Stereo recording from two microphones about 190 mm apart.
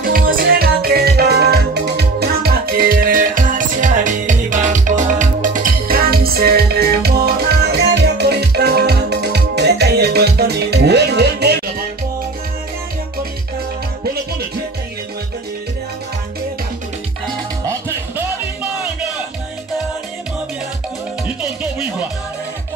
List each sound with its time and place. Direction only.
0.0 s music: 50° right (ahead or behind)
17.6 s music: 15° right (ahead or behind)